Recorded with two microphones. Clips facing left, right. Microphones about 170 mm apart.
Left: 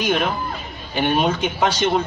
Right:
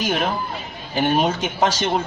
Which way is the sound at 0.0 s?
40° right (ahead or behind).